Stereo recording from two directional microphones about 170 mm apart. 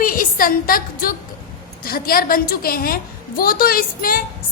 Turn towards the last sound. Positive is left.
turn(degrees=60)  # may be behind; listen again after turning